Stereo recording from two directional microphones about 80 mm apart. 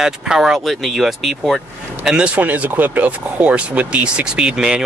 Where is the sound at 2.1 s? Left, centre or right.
Centre.